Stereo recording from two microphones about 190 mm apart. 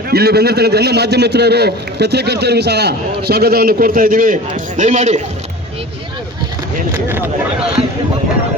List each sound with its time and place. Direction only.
0.1 s a man's voice: 55° right (ahead or behind); by 5.2 s 40° right (ahead or behind)
6.9 s speech: 10° right (ahead or behind)